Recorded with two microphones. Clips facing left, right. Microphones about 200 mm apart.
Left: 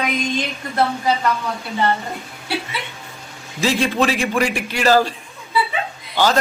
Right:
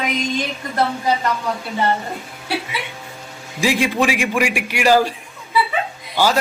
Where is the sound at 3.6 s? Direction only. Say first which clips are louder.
Even; 15° right (ahead or behind).